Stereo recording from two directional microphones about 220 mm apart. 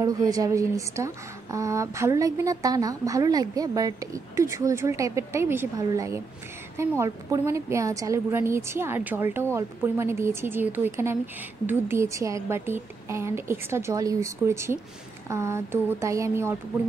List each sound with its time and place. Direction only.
0.0 s speech: 15° right (ahead or behind)